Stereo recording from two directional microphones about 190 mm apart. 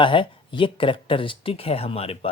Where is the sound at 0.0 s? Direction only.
25° left (ahead or behind).